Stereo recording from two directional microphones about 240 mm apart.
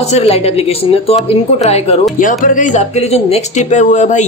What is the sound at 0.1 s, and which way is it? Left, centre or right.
Speech, left.